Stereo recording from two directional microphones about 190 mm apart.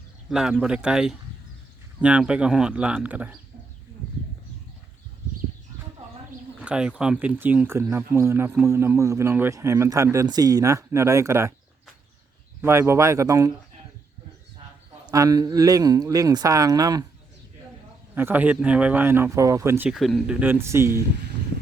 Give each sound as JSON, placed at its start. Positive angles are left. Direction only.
{"t": 0.3, "sound": "speech", "side_deg": 0}
{"t": 6.6, "sound": "speech", "side_deg": -5}
{"t": 12.6, "sound": "speech", "side_deg": -15}
{"t": 15.0, "sound": "speech", "side_deg": -20}
{"t": 18.1, "sound": "speech", "side_deg": -10}